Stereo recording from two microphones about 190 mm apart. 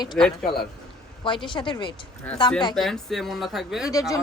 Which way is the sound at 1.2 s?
25° left (ahead or behind).